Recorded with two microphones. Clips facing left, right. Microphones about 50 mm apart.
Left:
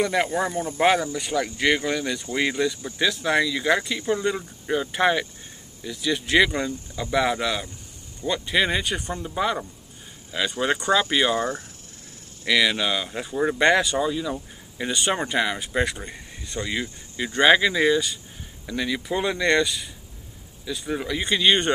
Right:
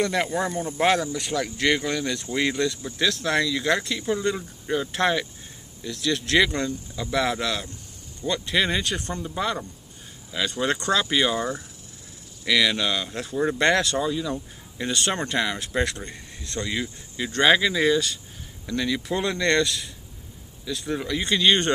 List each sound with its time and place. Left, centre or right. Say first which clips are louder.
0.0 s speech: left 1 dB; centre
11.3 s speech: left 2 dB; left
12.4 s speech: left 1 dB; centre